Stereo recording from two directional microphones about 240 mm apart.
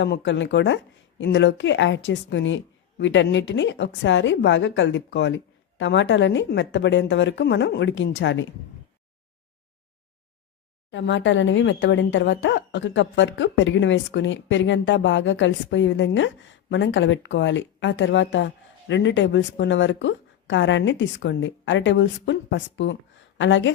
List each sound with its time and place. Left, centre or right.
0.0 s speech: left
10.9 s speech: left